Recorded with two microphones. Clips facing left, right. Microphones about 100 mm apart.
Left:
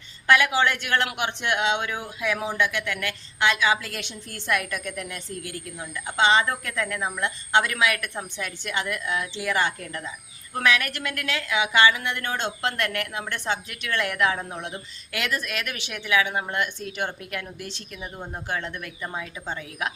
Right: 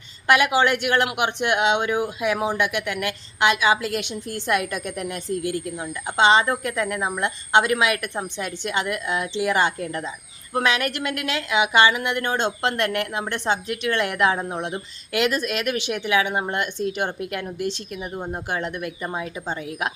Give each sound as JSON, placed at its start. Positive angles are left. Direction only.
{"t": 0.3, "sound": "speech", "side_deg": -20}